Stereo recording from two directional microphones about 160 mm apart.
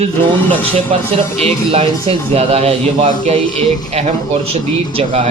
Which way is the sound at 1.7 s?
40° right (ahead or behind).